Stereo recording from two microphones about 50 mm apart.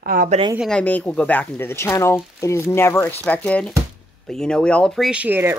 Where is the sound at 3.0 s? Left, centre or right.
Left.